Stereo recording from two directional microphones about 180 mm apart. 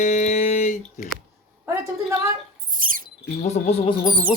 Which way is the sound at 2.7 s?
50° right (ahead or behind).